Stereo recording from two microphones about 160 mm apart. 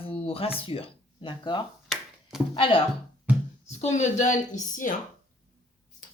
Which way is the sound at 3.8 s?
45° left (ahead or behind).